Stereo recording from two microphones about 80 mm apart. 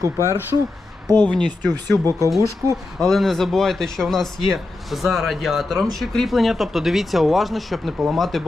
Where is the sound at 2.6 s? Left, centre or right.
Right.